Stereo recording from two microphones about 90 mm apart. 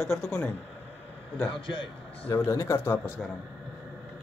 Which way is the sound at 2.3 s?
35° left (ahead or behind).